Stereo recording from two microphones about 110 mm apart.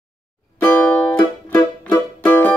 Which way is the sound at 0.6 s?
15° left (ahead or behind).